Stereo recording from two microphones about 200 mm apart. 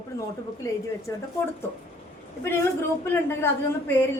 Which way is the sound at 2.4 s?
10° left (ahead or behind).